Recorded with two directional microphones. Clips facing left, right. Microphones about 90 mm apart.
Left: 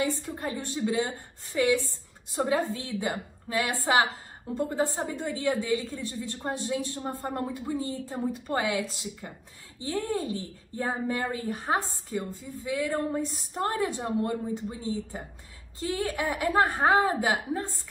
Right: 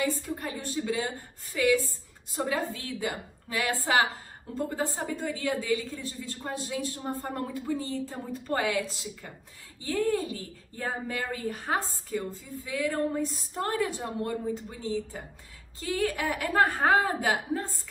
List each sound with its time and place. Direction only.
0.0 s speech: 25° left (ahead or behind)
9.8 s speech: 25° left (ahead or behind)